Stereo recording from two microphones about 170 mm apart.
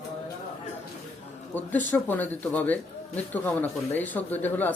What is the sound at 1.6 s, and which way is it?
A man's voice, 10° left (ahead or behind).